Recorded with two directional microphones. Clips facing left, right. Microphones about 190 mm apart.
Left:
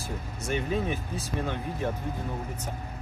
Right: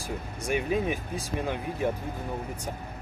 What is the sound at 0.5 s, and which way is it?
Speech, 10° right (ahead or behind).